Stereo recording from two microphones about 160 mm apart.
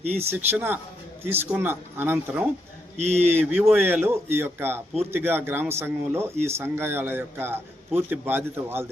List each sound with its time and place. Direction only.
0.0 s speech: 40° right (ahead or behind)
0.3 s a man's voice: 10° right (ahead or behind)
3.0 s speech: 45° right (ahead or behind)
3.3 s speech: centre (ahead or behind)
3.8 s a man's voice: 15° right (ahead or behind)